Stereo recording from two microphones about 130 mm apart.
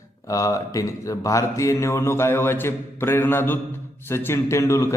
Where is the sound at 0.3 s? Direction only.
25° left (ahead or behind).